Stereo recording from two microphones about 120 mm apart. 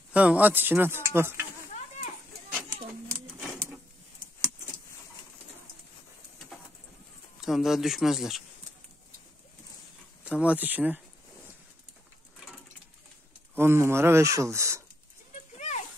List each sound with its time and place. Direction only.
0.1 s speech: 10° right (ahead or behind)
2.5 s a sound: 20° right (ahead or behind)
7.3 s speech: centre (ahead or behind)
10.2 s speech: 10° right (ahead or behind)
13.6 s speech: 20° right (ahead or behind)